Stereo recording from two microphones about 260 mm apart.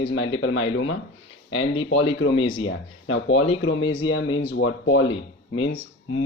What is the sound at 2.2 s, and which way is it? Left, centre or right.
Speech, left.